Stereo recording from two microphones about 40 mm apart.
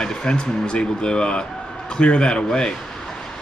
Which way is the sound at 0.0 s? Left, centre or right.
Left.